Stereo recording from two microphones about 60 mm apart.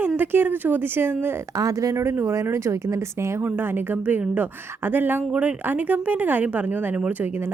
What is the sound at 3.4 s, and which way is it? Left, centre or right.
A woman's voice, right.